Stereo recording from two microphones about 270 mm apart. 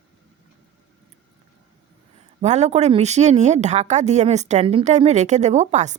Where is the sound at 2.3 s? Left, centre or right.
Right.